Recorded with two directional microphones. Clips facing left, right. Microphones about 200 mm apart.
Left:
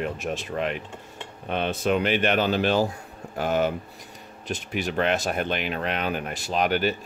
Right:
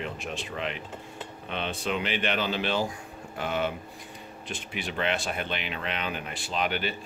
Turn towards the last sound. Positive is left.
turn(degrees=45)  # may be behind; listen again after turning